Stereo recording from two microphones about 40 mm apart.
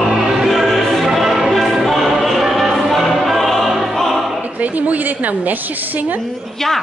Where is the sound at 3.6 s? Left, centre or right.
Centre.